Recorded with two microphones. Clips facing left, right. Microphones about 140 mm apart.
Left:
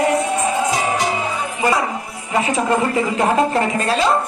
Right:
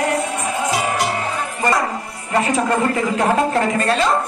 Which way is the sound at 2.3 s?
5° left (ahead or behind).